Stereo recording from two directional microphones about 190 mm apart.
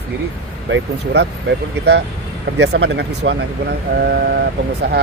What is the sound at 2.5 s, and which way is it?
Speech, 65° right (ahead or behind).